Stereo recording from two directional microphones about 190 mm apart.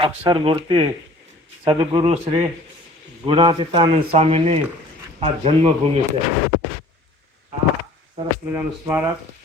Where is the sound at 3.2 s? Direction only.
25° right (ahead or behind).